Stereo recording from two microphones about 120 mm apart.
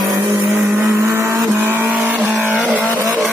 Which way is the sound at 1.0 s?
20° right (ahead or behind).